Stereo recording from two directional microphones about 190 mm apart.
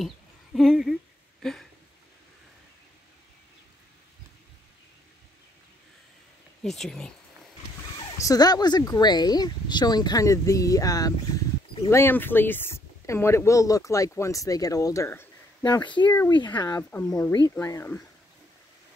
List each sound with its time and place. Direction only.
0.6 s speech: centre (ahead or behind)
1.4 s a sound: centre (ahead or behind)
6.6 s speech: centre (ahead or behind)
8.2 s speech: 20° left (ahead or behind)
16.9 s speech: 10° left (ahead or behind)